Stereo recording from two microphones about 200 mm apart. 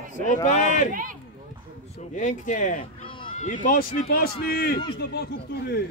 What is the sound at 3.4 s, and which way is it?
A man's voice, 40° left (ahead or behind).